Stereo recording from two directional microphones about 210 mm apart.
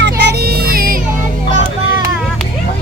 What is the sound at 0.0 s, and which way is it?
Music, 55° right (ahead or behind).